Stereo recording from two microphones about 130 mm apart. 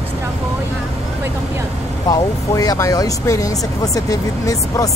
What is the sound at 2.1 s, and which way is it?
Speech, 30° left (ahead or behind).